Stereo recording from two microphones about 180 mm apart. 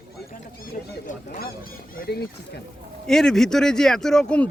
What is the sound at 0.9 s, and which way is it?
Speech, 50° left (ahead or behind).